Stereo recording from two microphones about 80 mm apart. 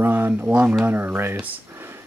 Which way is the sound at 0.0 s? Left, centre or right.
Right.